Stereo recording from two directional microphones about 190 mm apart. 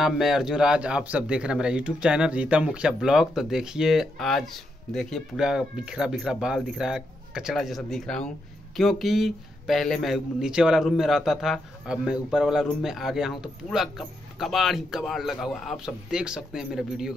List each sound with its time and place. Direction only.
0.0 s a man's voice: centre (ahead or behind)